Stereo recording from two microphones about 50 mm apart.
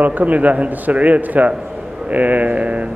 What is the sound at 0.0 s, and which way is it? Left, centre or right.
A man's voice, right.